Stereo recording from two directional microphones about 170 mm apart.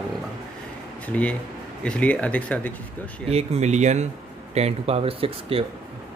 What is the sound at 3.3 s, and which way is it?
Speech, 40° right (ahead or behind).